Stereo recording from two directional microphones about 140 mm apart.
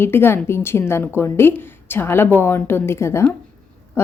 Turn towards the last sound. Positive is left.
turn(degrees=20)  # may be behind; listen again after turning